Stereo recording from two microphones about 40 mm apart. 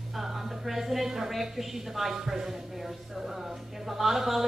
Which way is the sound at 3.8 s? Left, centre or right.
Centre.